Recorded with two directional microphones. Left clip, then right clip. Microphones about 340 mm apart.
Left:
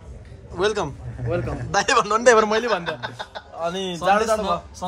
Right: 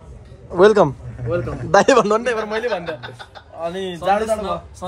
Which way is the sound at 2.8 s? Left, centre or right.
Left.